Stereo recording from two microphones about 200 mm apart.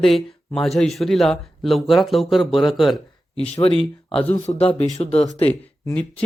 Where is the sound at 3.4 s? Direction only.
30° left (ahead or behind).